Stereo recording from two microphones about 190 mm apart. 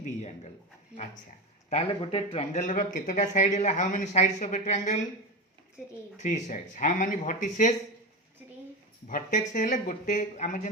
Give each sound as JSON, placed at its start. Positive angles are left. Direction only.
{"t": 0.0, "sound": "a sound", "side_deg": 35}
{"t": 1.7, "sound": "speech", "side_deg": 30}
{"t": 6.1, "sound": "speech", "side_deg": 40}
{"t": 9.0, "sound": "speech", "side_deg": 40}